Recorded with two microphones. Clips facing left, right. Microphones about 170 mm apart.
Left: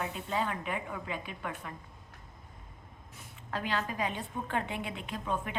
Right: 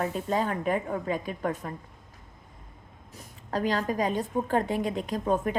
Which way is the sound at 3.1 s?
40° right (ahead or behind).